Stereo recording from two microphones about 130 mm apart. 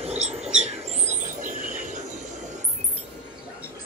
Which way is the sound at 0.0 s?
55° right (ahead or behind).